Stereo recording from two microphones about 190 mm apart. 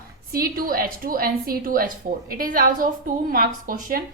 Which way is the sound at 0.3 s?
50° right (ahead or behind).